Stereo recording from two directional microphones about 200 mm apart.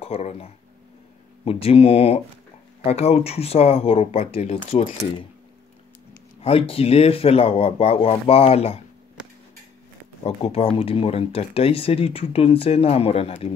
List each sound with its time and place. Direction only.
0.0 s speech: 30° left (ahead or behind)
6.4 s speech: 30° left (ahead or behind)
10.2 s speech: 30° left (ahead or behind)